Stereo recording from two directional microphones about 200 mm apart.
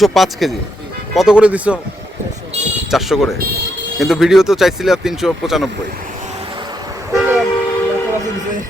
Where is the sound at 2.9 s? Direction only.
Centre (ahead or behind).